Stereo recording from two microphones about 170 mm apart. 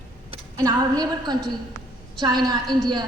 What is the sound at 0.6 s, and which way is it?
A woman's voice, 20° right (ahead or behind).